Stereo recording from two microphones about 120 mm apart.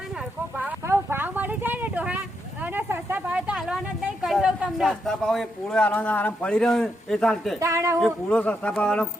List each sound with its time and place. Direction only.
0.2 s a sound: 15° right (ahead or behind)
3.8 s a woman's voice: centre (ahead or behind)
7.6 s speech: 25° right (ahead or behind)
7.9 s speech: 5° left (ahead or behind)